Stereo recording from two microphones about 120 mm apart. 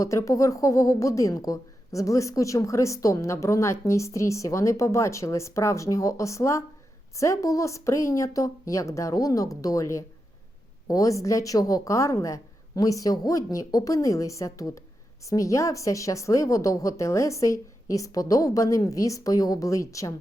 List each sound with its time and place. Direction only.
0.0 s a woman's voice: 25° left (ahead or behind)